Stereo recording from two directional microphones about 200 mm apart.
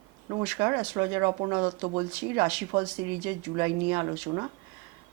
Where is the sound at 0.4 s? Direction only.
15° right (ahead or behind).